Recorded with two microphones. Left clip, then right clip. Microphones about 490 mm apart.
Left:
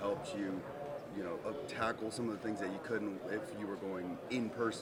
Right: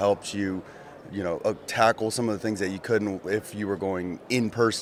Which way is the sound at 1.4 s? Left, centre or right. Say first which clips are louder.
Right 17 dB; right.